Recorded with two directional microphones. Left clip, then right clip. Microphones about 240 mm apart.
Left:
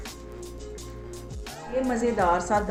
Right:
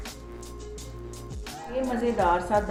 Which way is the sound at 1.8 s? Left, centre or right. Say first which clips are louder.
Even; centre.